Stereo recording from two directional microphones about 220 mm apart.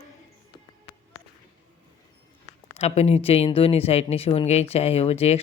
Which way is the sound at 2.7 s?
30° left (ahead or behind).